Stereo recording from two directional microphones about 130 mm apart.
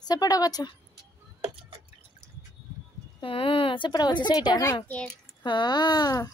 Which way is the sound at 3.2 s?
45° left (ahead or behind).